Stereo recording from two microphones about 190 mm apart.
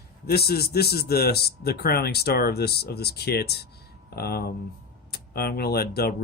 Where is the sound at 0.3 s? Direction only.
55° left (ahead or behind).